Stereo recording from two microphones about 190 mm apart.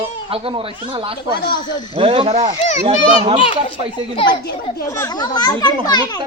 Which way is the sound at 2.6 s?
35° left (ahead or behind).